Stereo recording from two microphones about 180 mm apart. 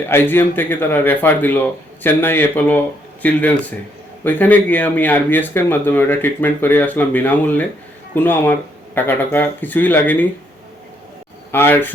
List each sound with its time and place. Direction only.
0.1 s speech: 15° left (ahead or behind)
11.5 s speech: 10° left (ahead or behind)